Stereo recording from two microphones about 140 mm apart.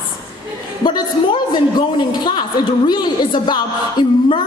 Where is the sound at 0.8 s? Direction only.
30° left (ahead or behind).